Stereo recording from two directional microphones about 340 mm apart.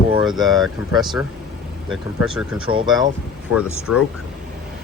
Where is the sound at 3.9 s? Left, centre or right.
Left.